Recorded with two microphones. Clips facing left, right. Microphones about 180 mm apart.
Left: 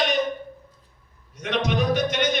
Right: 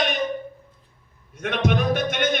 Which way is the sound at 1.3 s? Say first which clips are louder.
Right 2 dB; 55° right (ahead or behind).